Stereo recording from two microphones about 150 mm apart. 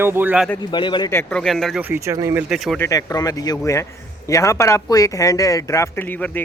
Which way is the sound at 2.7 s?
20° left (ahead or behind).